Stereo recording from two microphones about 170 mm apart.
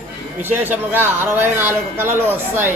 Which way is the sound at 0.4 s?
10° right (ahead or behind).